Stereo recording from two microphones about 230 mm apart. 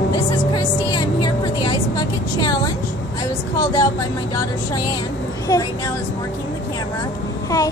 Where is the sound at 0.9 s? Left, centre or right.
Centre.